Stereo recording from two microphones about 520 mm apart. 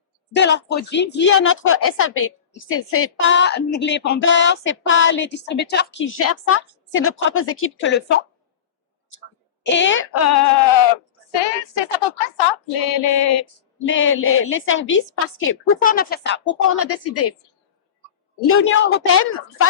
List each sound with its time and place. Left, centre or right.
0.3 s a woman's voice: centre
9.6 s a woman's voice: left
11.3 s speech: left
13.0 s a sound: left
13.8 s a woman's voice: left
18.4 s a woman's voice: left